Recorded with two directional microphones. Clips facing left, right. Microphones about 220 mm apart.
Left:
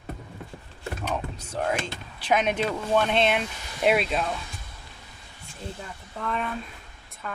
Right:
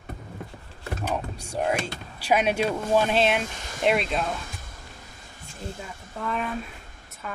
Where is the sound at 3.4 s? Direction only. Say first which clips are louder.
Right 1 dB; 45° right (ahead or behind).